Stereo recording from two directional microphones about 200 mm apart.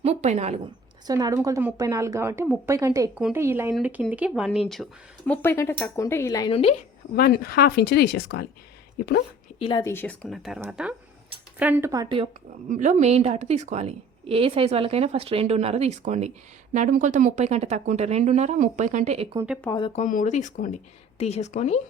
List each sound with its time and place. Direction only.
0.0 s a woman's voice: 35° right (ahead or behind)
1.0 s speech: 15° right (ahead or behind); by 6.5 s 15° left (ahead or behind)
6.5 s a woman's voice: 30° left (ahead or behind)
7.2 s speech: 50° left (ahead or behind)
9.6 s a woman's voice: 25° left (ahead or behind)
9.8 s speech: 10° left (ahead or behind); by 12.3 s 25° right (ahead or behind)
12.6 s a woman's voice: 40° right (ahead or behind)
19.7 s a woman's voice: 25° left (ahead or behind)
20.0 s speech: 40° left (ahead or behind)